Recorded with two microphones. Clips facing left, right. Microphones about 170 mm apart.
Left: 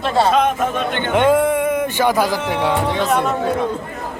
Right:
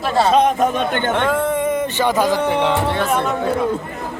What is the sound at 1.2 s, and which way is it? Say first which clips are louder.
Speech: left 8 dB; 15° left (ahead or behind).